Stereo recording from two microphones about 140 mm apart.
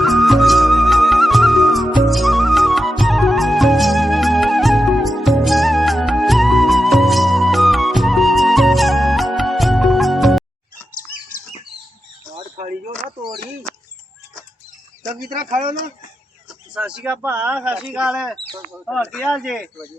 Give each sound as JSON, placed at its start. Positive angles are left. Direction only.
{"t": 0.0, "sound": "music", "side_deg": 0}
{"t": 12.5, "sound": "a sound", "side_deg": -55}
{"t": 16.7, "sound": "speech", "side_deg": -5}